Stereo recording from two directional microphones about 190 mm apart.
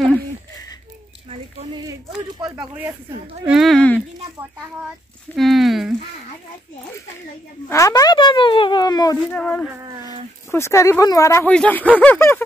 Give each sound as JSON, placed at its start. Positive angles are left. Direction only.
{"t": 3.4, "sound": "speech", "side_deg": 0}
{"t": 5.3, "sound": "speech", "side_deg": 0}
{"t": 7.7, "sound": "speech", "side_deg": 15}
{"t": 9.3, "sound": "speech", "side_deg": 5}